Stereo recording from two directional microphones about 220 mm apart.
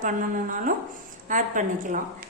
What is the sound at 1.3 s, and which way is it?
Speech, 35° right (ahead or behind).